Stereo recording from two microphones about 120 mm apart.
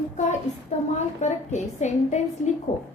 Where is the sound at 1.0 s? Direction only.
75° left (ahead or behind).